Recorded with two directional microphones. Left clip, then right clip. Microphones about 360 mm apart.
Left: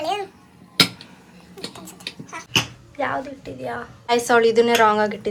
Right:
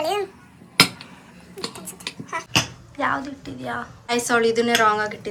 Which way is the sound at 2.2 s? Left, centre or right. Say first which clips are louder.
Even; centre.